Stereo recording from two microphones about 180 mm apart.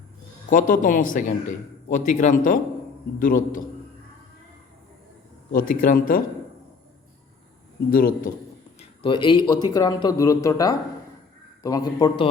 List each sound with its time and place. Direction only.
0.5 s a man's voice: 50° left (ahead or behind)
5.5 s a man's voice: 50° left (ahead or behind)
7.9 s a man's voice: 55° left (ahead or behind)
8.8 s a man's voice: 30° left (ahead or behind)